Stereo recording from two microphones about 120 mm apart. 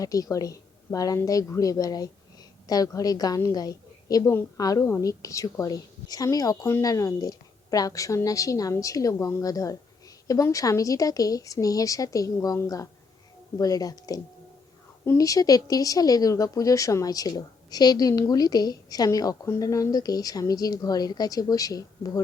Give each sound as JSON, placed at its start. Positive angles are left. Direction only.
{"t": 0.0, "sound": "a woman's voice", "side_deg": 30}